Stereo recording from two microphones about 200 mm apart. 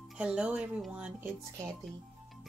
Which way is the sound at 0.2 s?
5° right (ahead or behind).